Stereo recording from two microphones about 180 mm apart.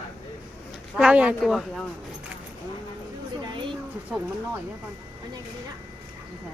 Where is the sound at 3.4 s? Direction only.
25° right (ahead or behind).